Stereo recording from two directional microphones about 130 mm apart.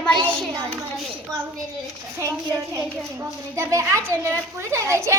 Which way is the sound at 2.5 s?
15° right (ahead or behind).